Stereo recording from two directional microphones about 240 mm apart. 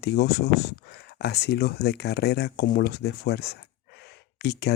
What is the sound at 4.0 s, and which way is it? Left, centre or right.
Gasp, left.